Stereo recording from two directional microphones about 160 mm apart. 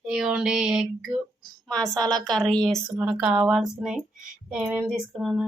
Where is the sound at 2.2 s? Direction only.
5° left (ahead or behind).